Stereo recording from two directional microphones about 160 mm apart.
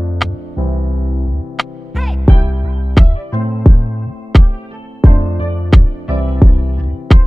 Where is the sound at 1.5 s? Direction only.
Centre (ahead or behind).